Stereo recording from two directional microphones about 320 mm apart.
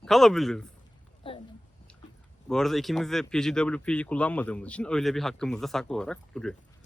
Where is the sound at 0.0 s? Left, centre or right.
Centre.